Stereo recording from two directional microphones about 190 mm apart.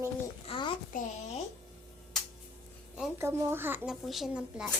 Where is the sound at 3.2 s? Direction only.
10° right (ahead or behind).